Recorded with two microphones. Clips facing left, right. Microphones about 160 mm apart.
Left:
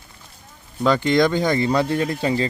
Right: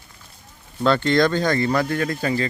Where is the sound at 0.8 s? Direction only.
15° left (ahead or behind).